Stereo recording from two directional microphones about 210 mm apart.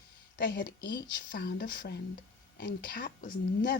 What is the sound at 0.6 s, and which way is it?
Speech, 45° left (ahead or behind).